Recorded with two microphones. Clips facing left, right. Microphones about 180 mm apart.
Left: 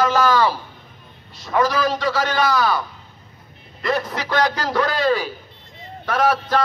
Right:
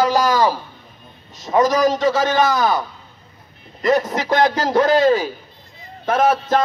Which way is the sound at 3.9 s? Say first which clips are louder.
Right 5 dB; 45° right (ahead or behind).